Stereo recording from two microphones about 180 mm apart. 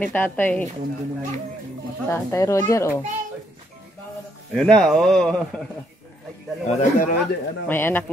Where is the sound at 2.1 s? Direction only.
15° left (ahead or behind).